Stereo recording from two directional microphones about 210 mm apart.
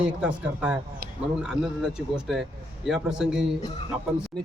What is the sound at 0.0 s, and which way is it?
Speech, 5° right (ahead or behind).